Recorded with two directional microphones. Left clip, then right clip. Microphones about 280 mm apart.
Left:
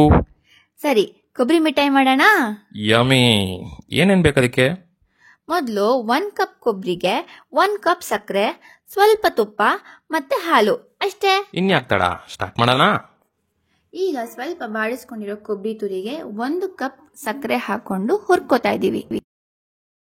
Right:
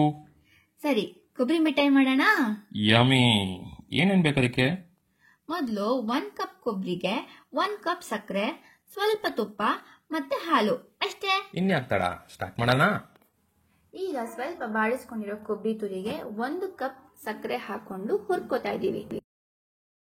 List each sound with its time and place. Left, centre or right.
1.5 s a woman's voice: left
13.9 s a woman's voice: left